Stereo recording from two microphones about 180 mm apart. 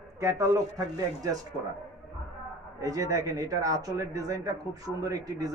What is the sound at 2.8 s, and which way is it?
Speech, 20° right (ahead or behind).